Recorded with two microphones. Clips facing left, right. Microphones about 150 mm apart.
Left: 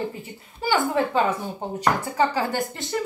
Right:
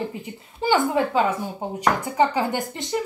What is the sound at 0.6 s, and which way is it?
A woman's voice, 20° right (ahead or behind).